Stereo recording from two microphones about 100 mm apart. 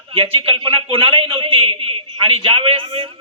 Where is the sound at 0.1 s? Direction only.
65° right (ahead or behind).